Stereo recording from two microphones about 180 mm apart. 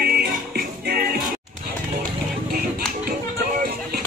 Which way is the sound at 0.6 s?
60° right (ahead or behind).